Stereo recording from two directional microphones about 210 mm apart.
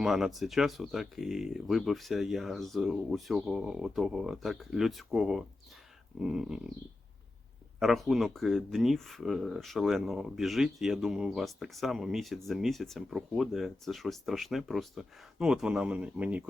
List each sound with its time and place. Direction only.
0.0 s speech: centre (ahead or behind)
7.8 s speech: centre (ahead or behind)